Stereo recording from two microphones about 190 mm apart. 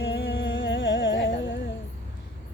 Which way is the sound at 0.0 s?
75° left (ahead or behind).